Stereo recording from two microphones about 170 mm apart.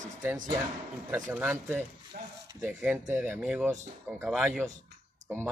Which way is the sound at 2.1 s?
55° right (ahead or behind).